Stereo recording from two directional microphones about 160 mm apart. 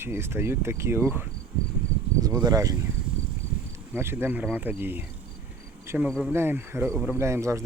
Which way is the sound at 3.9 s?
15° right (ahead or behind).